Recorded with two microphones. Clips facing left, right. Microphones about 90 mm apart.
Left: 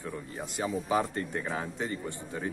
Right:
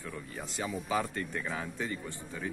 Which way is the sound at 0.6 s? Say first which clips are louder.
Left 4 dB; 30° left (ahead or behind).